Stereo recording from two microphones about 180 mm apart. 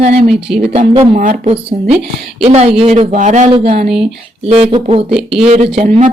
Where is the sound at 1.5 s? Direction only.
35° right (ahead or behind).